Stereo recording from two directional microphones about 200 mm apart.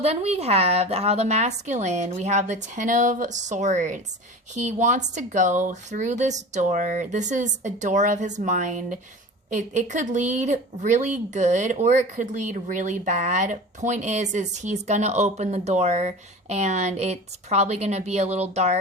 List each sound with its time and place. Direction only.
0.0 s speech: 30° right (ahead or behind)